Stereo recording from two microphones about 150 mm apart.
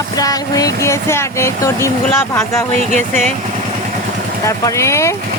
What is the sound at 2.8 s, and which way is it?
Speech, 50° right (ahead or behind).